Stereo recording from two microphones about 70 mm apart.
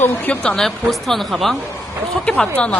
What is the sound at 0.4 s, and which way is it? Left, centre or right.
Speech, centre.